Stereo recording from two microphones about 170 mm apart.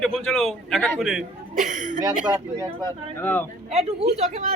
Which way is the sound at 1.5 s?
45° right (ahead or behind).